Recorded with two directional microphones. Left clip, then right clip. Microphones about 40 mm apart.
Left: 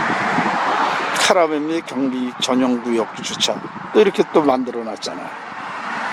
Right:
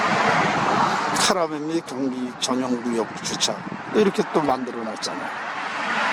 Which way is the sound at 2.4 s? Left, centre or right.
Left.